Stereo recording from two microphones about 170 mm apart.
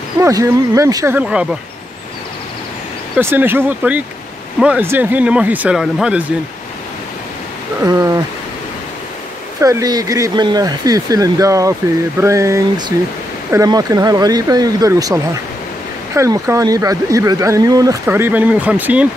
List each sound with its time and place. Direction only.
0.2 s speech: 20° right (ahead or behind)
1.1 s speech: 5° right (ahead or behind)
3.2 s speech: 15° right (ahead or behind)
7.8 s speech: 20° right (ahead or behind)
9.6 s speech: 20° right (ahead or behind)
16.2 s speech: 20° right (ahead or behind)